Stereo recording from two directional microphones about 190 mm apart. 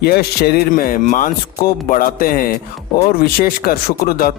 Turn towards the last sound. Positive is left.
turn(degrees=50)  # may be behind; listen again after turning